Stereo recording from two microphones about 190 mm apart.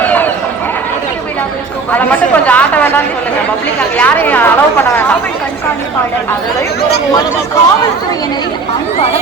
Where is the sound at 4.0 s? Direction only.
10° left (ahead or behind).